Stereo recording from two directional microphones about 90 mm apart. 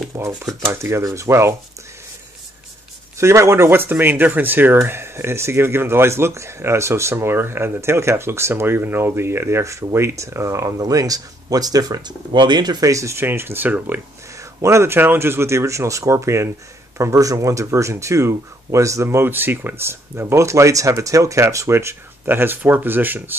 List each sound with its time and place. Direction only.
0.1 s speech: 35° right (ahead or behind)
3.2 s speech: 30° right (ahead or behind)
14.3 s speech: 35° right (ahead or behind)